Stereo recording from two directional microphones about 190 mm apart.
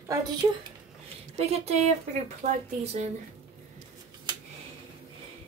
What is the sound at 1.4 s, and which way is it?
Speech, 35° right (ahead or behind).